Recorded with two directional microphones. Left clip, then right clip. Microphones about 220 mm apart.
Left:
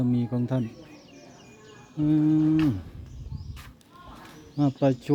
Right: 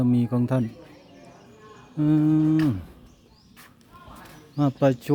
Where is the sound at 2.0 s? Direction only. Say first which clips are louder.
Right 2 dB; 20° right (ahead or behind).